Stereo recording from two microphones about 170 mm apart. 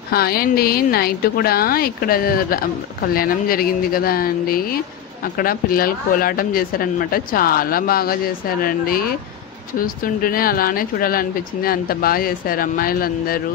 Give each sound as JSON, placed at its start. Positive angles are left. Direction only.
{"t": 0.1, "sound": "a woman's voice", "side_deg": 65}